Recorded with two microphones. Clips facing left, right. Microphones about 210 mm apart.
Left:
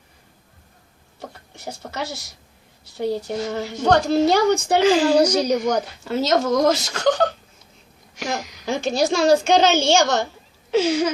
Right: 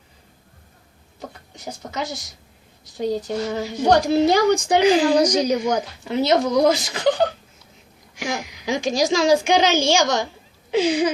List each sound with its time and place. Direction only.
1.2 s a woman's voice: 15° right (ahead or behind)
8.1 s speech: 15° right (ahead or behind)
9.0 s a woman's voice: 60° left (ahead or behind)
9.3 s a woman's voice: 15° right (ahead or behind)